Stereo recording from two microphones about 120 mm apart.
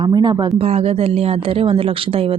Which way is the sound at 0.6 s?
55° right (ahead or behind).